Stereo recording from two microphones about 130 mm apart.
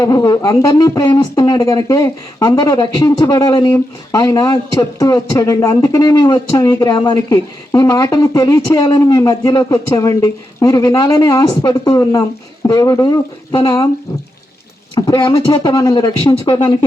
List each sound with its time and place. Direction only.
0.0 s speech: 25° left (ahead or behind)
14.9 s speech: 30° left (ahead or behind)